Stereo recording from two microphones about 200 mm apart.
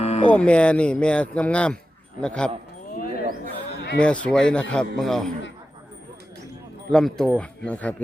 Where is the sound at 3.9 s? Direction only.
5° left (ahead or behind).